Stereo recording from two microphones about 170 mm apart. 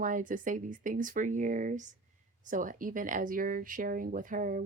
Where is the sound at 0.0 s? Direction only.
50° right (ahead or behind).